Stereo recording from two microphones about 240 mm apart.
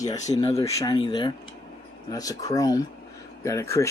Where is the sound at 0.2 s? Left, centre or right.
Left.